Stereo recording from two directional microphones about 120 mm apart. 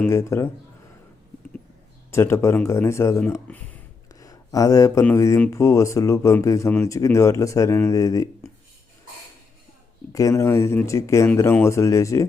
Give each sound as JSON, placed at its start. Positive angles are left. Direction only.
{"t": 0.1, "sound": "speech", "side_deg": 25}
{"t": 2.0, "sound": "speech", "side_deg": 20}
{"t": 4.1, "sound": "a sound", "side_deg": 30}
{"t": 5.1, "sound": "speech", "side_deg": 25}
{"t": 10.1, "sound": "speech", "side_deg": 30}